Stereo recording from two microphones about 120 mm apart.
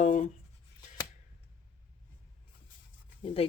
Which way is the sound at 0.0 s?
70° left (ahead or behind).